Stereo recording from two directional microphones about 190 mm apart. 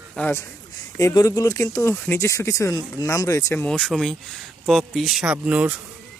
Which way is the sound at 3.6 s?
5° left (ahead or behind).